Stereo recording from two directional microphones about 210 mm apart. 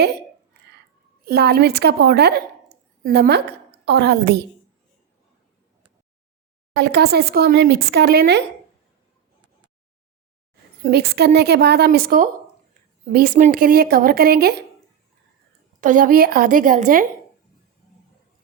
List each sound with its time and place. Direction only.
1.2 s a woman's voice: 45° right (ahead or behind)
6.7 s a woman's voice: 50° right (ahead or behind)
10.8 s a woman's voice: 50° right (ahead or behind)
15.8 s a woman's voice: 40° right (ahead or behind)